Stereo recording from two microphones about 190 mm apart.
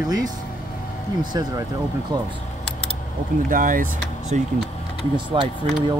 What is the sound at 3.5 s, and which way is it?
Speech, 45° right (ahead or behind).